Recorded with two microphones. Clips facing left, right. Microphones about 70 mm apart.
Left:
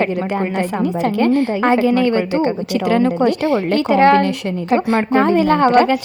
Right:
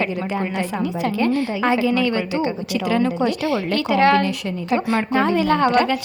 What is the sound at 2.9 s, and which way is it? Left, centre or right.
A woman's voice, left.